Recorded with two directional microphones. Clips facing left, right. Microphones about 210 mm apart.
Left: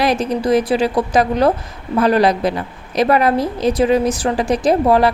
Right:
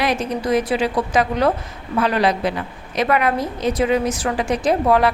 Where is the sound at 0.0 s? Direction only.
35° left (ahead or behind).